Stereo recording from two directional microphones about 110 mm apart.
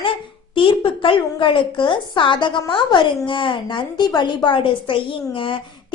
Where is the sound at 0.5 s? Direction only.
50° left (ahead or behind).